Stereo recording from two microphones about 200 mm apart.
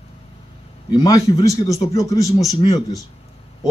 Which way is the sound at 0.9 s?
20° left (ahead or behind).